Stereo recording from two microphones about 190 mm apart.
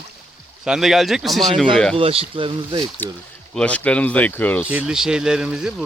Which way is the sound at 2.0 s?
30° right (ahead or behind).